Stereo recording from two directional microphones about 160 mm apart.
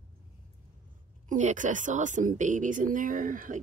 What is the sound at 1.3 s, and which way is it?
A woman's voice, 50° right (ahead or behind).